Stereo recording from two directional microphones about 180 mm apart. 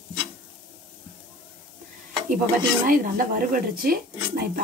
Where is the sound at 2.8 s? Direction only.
50° right (ahead or behind).